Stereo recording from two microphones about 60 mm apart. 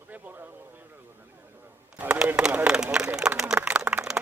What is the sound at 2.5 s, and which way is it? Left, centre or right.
Speech, centre.